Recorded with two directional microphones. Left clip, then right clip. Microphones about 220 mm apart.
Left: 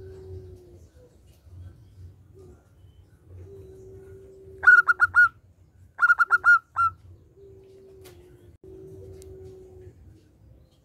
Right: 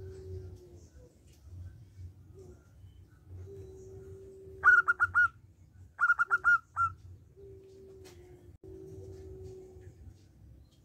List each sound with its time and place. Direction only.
4.6 s bird: 15° left (ahead or behind)